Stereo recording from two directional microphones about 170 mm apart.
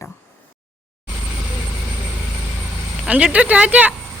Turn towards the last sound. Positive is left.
turn(degrees=-10)  # may be behind; listen again after turning